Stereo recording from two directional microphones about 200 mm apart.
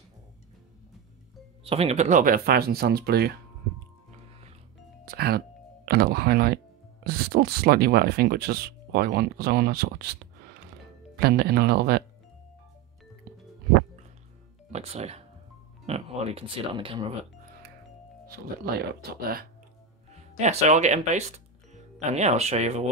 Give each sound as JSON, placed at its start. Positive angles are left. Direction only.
{"t": 1.6, "sound": "speech", "side_deg": -30}
{"t": 5.0, "sound": "music", "side_deg": -50}
{"t": 5.9, "sound": "speech", "side_deg": -50}
{"t": 11.1, "sound": "speech", "side_deg": -50}
{"t": 14.7, "sound": "music", "side_deg": -30}
{"t": 15.9, "sound": "speech", "side_deg": -30}
{"t": 18.3, "sound": "speech", "side_deg": -50}
{"t": 20.3, "sound": "speech", "side_deg": -35}